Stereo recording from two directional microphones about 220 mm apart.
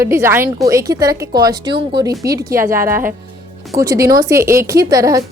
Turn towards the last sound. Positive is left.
turn(degrees=-15)  # may be behind; listen again after turning